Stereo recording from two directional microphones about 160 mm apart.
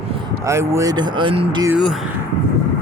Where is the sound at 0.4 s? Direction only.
15° right (ahead or behind); by 1.6 s 30° right (ahead or behind).